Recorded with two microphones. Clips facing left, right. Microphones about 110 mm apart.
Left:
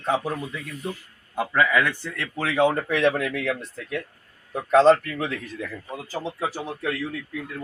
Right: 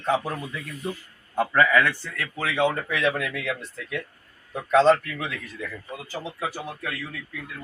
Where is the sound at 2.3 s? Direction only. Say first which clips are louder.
Left 3 dB; 35° left (ahead or behind).